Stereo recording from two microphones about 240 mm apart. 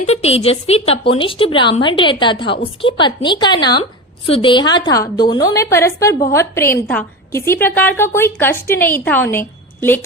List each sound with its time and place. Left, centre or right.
0.0 s a woman's voice: left; by 10.0 s centre